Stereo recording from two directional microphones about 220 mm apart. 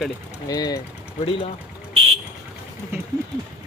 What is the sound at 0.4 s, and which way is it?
Speech, 15° left (ahead or behind).